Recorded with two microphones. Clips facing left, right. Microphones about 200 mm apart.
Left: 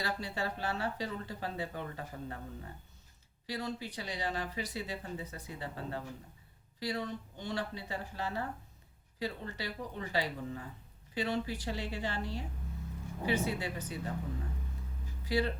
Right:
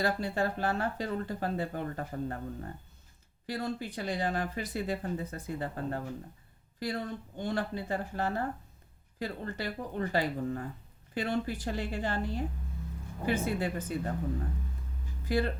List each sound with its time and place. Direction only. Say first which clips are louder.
0.0 s speech: right 7 dB; 50° right (ahead or behind)
15.2 s speech: right 2 dB; 50° right (ahead or behind)